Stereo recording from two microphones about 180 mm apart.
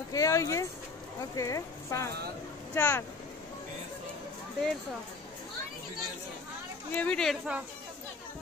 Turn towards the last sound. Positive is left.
turn(degrees=0)  # may be behind; listen again after turning